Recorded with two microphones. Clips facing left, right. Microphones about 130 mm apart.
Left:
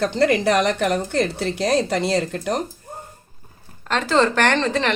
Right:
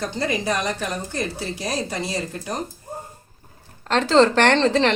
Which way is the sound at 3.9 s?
30° right (ahead or behind).